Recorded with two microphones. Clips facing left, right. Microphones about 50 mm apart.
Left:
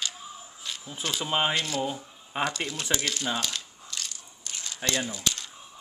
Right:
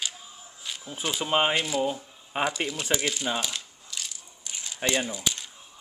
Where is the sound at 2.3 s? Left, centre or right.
Centre.